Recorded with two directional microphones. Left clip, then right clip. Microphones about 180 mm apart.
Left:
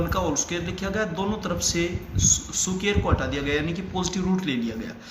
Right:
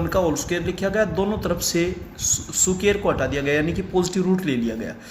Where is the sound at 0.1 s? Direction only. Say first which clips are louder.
Right 5 dB; 50° right (ahead or behind).